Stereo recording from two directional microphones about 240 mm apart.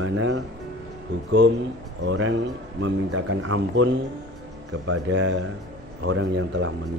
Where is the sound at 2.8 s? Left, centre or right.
Right.